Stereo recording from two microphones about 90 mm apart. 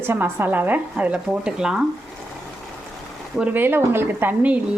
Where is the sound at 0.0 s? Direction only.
25° right (ahead or behind); by 1.8 s 10° right (ahead or behind).